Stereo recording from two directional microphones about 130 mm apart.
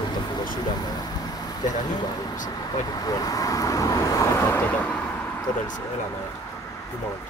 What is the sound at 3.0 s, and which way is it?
Speech, 30° left (ahead or behind).